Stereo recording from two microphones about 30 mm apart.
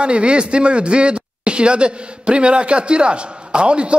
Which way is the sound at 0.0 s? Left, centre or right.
Right.